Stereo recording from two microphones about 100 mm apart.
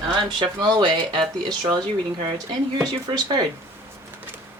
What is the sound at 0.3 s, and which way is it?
Speech, 50° right (ahead or behind).